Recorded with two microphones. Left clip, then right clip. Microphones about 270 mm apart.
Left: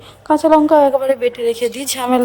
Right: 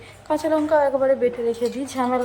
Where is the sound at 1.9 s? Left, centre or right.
Left.